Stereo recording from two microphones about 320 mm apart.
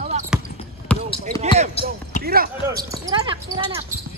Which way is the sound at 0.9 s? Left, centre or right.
Centre.